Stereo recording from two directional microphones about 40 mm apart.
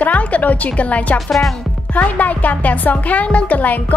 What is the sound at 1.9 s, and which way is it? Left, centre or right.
A woman's voice, left.